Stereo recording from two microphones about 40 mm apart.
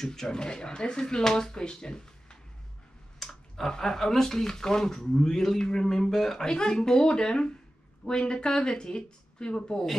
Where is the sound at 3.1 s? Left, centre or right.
Centre.